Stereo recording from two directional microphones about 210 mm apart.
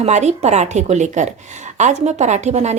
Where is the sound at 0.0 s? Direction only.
35° right (ahead or behind).